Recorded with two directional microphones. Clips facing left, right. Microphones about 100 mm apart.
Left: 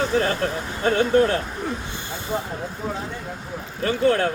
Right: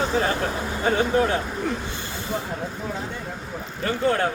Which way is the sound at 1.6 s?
15° left (ahead or behind).